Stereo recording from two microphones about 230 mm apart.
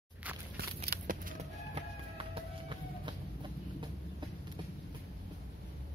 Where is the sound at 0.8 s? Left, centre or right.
Right.